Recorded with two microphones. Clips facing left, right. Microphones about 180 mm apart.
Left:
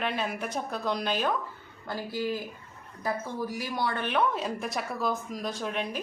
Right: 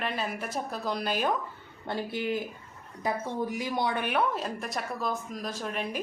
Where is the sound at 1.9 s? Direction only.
25° right (ahead or behind).